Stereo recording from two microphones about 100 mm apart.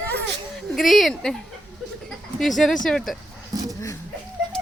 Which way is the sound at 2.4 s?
Centre (ahead or behind).